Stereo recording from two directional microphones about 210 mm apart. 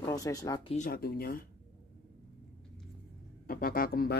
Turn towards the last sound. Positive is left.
turn(degrees=45)  # may be behind; listen again after turning